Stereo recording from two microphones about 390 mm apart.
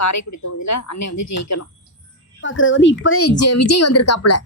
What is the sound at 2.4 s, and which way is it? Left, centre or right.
Speech, left.